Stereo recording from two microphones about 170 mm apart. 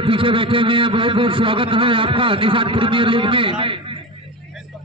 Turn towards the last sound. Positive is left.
turn(degrees=-30)  # may be behind; listen again after turning